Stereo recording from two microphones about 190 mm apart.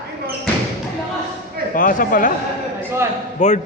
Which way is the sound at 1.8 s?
45° left (ahead or behind).